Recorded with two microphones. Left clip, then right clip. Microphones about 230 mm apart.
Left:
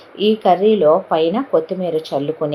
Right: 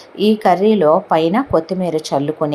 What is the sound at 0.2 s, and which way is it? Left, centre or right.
Speech, right.